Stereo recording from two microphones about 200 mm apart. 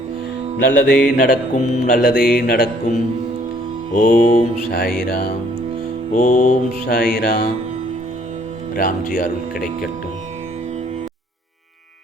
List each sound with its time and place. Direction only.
0.8 s mantra: 45° left (ahead or behind)
3.9 s music: 40° left (ahead or behind)
4.7 s mantra: 50° left (ahead or behind)
6.1 s mantra: 40° left (ahead or behind)
8.7 s mantra: 45° left (ahead or behind)